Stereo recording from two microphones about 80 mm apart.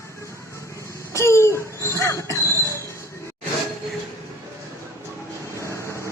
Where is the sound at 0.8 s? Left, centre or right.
Left.